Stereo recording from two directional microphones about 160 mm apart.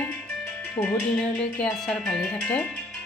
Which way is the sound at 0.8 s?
40° left (ahead or behind).